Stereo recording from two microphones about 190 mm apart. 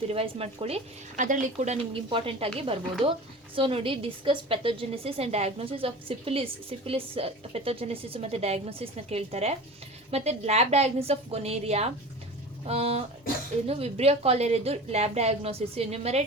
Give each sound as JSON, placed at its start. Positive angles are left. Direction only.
{"t": 0.1, "sound": "a woman's voice", "side_deg": -30}